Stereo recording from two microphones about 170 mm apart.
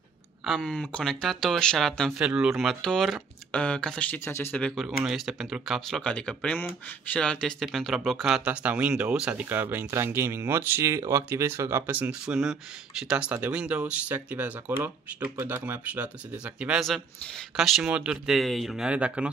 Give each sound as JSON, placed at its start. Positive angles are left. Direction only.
{"t": 0.5, "sound": "speech", "side_deg": 5}